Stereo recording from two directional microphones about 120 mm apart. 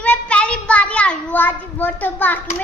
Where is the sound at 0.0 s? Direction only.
10° left (ahead or behind).